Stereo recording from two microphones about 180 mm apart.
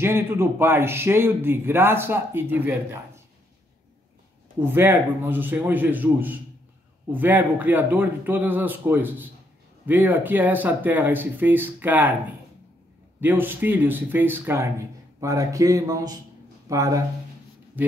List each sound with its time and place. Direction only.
0.0 s speech: 15° right (ahead or behind)
4.6 s speech: 10° right (ahead or behind)
13.2 s speech: 10° right (ahead or behind)